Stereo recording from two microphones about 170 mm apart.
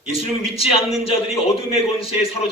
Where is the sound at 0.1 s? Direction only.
35° left (ahead or behind).